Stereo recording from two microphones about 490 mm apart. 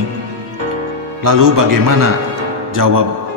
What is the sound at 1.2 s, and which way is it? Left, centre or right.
Speech, right.